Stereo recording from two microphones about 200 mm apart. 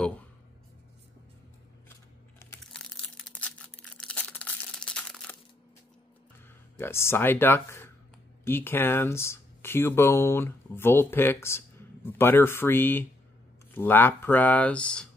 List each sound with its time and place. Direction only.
1.9 s scissors: 15° left (ahead or behind)
2.6 s crumpling: 5° left (ahead or behind)
6.8 s speech: 10° left (ahead or behind)